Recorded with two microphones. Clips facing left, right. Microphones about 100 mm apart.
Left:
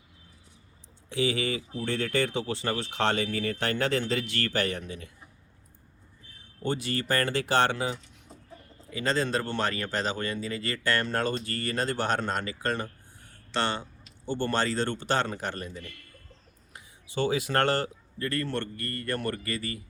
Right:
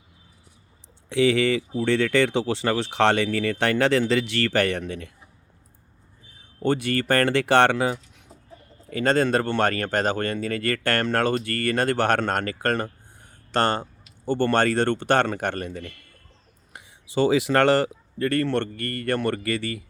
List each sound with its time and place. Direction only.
1.1 s speech: 75° right (ahead or behind)
6.6 s speech: 60° right (ahead or behind)
14.3 s speech: 60° right (ahead or behind)
16.7 s speech: 85° right